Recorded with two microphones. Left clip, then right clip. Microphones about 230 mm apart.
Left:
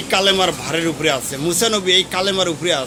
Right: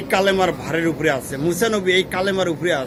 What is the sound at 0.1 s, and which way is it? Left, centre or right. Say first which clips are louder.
A man's voice: left 2 dB; left.